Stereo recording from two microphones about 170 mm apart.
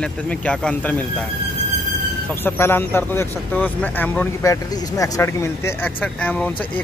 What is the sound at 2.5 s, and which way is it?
Speech, 15° left (ahead or behind).